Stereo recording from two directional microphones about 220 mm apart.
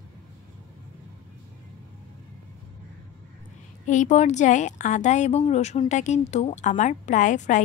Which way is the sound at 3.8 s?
35° left (ahead or behind).